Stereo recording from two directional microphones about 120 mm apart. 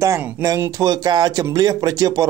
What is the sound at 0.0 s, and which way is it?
Speech, 25° right (ahead or behind).